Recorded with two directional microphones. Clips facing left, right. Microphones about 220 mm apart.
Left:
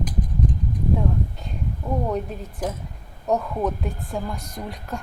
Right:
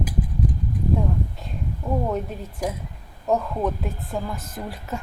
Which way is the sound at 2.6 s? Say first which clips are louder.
Right 1 dB; 10° right (ahead or behind).